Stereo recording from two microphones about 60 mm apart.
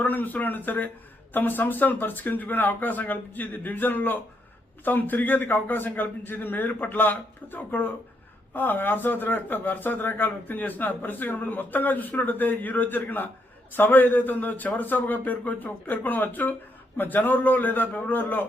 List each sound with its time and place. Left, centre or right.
0.0 s speech: left